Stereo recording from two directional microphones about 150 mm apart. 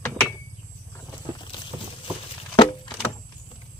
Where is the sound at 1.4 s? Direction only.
30° left (ahead or behind).